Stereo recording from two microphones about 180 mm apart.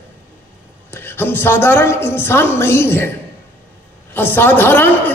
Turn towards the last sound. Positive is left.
turn(degrees=10)  # may be behind; listen again after turning